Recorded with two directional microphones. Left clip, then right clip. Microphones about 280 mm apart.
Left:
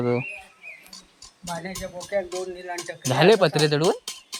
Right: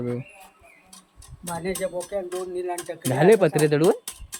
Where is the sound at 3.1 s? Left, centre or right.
Centre.